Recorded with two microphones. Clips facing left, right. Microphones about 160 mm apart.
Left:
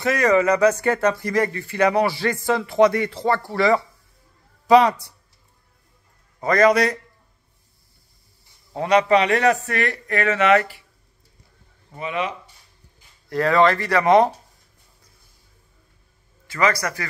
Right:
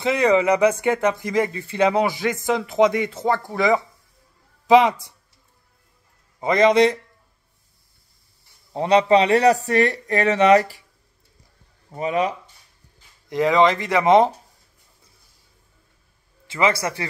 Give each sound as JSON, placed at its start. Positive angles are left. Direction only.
{"t": 0.0, "sound": "a woman's voice", "side_deg": -15}
{"t": 6.4, "sound": "speech", "side_deg": -20}
{"t": 8.7, "sound": "a man's voice", "side_deg": -30}
{"t": 12.0, "sound": "a man's voice", "side_deg": -40}
{"t": 13.3, "sound": "speech", "side_deg": -15}
{"t": 16.4, "sound": "speech", "side_deg": -25}